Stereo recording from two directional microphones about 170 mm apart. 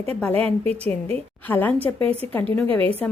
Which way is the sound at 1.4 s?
10° left (ahead or behind).